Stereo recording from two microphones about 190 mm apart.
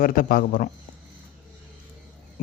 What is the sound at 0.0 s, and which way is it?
Speech, 45° left (ahead or behind).